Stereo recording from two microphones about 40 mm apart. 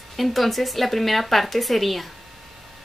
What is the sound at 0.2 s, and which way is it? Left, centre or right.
Speech, centre.